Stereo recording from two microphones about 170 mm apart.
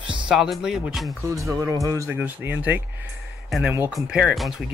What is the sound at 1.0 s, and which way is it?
Speech, 20° right (ahead or behind).